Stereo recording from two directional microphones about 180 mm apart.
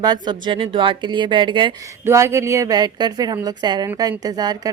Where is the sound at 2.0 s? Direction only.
15° right (ahead or behind).